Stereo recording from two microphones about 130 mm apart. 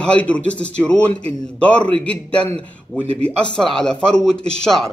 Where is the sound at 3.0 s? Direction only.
50° right (ahead or behind).